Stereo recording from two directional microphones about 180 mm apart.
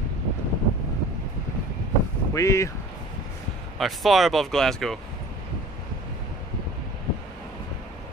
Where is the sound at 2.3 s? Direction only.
15° left (ahead or behind).